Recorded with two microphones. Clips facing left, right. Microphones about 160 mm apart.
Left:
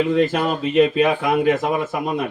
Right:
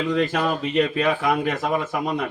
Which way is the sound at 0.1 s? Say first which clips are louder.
Left 3 dB; 25° left (ahead or behind).